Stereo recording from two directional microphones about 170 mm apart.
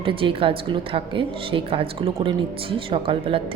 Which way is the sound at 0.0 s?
30° right (ahead or behind).